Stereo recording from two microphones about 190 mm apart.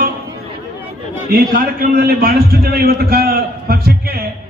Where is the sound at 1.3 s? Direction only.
50° right (ahead or behind).